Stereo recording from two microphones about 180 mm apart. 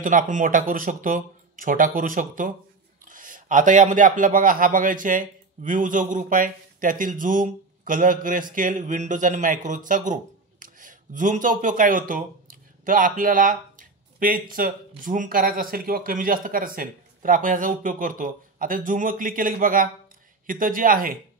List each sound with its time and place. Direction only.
0.0 s a man's voice: 45° right (ahead or behind)